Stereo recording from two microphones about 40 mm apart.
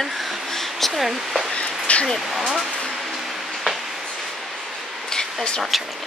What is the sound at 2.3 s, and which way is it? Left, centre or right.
Speech, centre.